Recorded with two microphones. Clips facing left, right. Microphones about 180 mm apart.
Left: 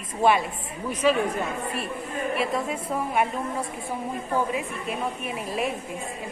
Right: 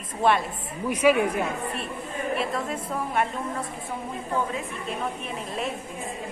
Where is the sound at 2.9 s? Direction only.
5° left (ahead or behind).